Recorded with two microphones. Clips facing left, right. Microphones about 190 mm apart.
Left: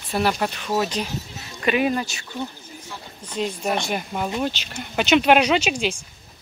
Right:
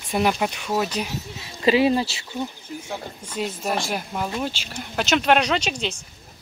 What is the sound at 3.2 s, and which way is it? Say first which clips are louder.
Speech: left 3 dB; 5° right (ahead or behind).